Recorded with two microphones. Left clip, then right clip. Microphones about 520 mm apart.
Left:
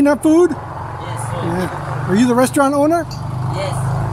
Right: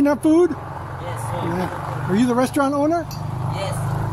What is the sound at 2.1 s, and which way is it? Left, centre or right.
Speech, right.